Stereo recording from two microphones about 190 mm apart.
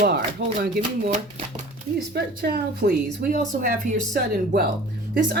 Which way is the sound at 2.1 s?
55° right (ahead or behind).